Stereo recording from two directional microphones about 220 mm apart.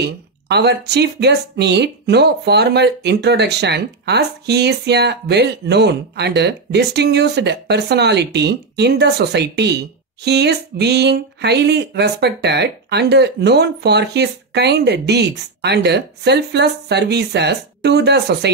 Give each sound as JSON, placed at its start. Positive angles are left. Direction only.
{"t": 0.0, "sound": "speech", "side_deg": -50}